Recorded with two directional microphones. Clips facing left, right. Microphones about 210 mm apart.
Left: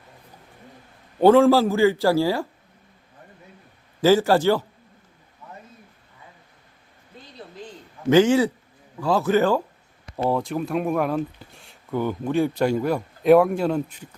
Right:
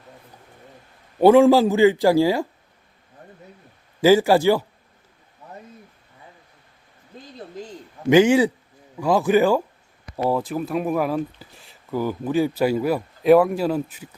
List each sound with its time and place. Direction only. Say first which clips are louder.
1.2 s a man's voice: right 2 dB; 15° right (ahead or behind)
4.0 s a man's voice: right 2 dB; 10° right (ahead or behind)
8.1 s a man's voice: right 2 dB; 15° right (ahead or behind)